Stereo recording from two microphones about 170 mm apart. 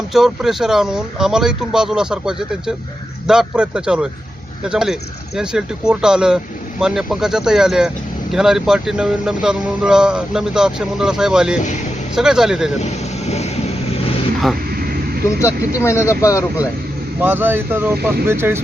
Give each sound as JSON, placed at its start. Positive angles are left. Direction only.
{"t": 0.1, "sound": "speech", "side_deg": 0}
{"t": 12.8, "sound": "speech", "side_deg": 40}
{"t": 15.4, "sound": "speech", "side_deg": 15}
{"t": 17.2, "sound": "speech", "side_deg": -10}